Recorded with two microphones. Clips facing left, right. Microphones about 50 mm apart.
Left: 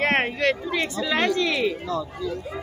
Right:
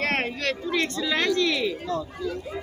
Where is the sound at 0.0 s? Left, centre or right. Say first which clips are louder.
Left 5 dB; left.